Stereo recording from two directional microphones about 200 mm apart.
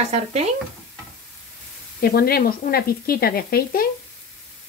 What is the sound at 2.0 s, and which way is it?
Speech, 50° left (ahead or behind).